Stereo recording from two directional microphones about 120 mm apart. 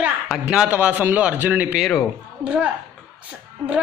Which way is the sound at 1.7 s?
Centre (ahead or behind).